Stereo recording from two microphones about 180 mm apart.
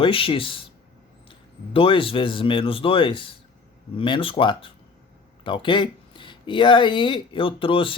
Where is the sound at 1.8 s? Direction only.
30° left (ahead or behind).